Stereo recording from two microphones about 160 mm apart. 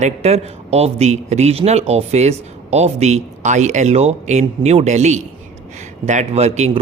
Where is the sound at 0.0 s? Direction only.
45° right (ahead or behind).